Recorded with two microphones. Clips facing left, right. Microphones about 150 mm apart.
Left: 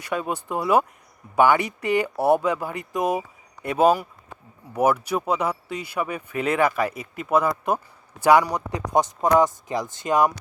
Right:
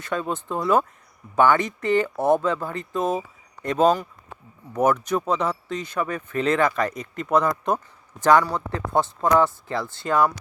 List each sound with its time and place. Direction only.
0.0 s speech: 10° left (ahead or behind)